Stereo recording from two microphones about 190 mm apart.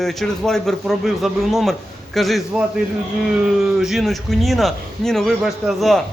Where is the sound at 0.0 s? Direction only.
Centre (ahead or behind).